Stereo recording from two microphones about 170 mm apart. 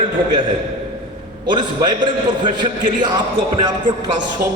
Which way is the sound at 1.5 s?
25° right (ahead or behind).